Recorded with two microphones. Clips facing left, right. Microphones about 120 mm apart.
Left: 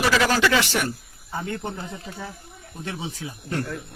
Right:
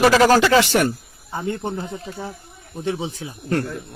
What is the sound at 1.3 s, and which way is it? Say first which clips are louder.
Speech: right 4 dB; 25° right (ahead or behind).